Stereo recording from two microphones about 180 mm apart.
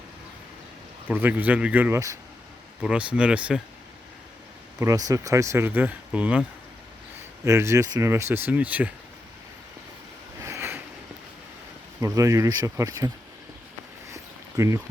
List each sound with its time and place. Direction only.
1.0 s speech: 10° right (ahead or behind)
4.8 s speech: 20° right (ahead or behind)
7.4 s speech: 15° right (ahead or behind)
10.4 s a sound: 15° right (ahead or behind)
11.9 s speech: 15° right (ahead or behind)
14.1 s a sound: 15° right (ahead or behind)